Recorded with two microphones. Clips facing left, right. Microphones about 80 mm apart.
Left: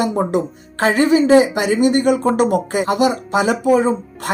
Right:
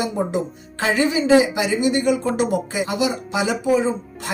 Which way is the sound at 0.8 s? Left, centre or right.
Left.